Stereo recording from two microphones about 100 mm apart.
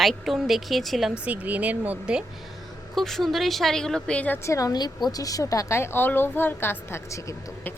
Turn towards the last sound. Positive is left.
turn(degrees=30)  # may be behind; listen again after turning